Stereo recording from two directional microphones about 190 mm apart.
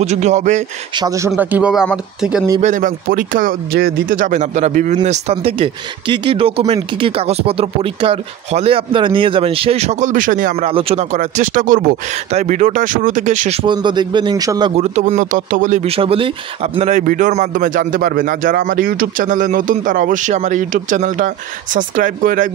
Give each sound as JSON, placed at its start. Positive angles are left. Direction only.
{"t": 0.0, "sound": "speech", "side_deg": -35}
{"t": 0.9, "sound": "speech", "side_deg": -20}
{"t": 1.3, "sound": "speech", "side_deg": -5}
{"t": 2.6, "sound": "speech", "side_deg": -45}
{"t": 10.6, "sound": "speech", "side_deg": -30}
{"t": 14.8, "sound": "speech", "side_deg": -35}